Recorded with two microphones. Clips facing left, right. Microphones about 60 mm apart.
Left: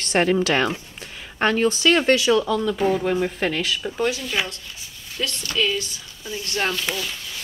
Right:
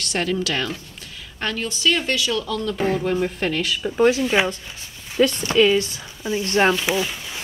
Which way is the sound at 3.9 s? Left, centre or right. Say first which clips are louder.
Right 11 dB; centre.